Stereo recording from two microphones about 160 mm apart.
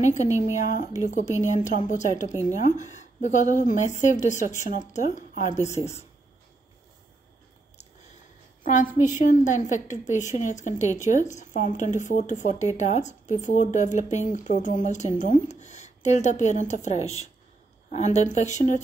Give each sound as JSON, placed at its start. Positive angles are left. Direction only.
{"t": 0.1, "sound": "a woman's voice", "side_deg": 50}
{"t": 9.0, "sound": "a woman's voice", "side_deg": 50}